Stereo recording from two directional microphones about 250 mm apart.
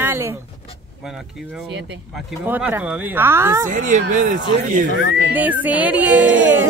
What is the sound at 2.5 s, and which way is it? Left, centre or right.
Speech, centre.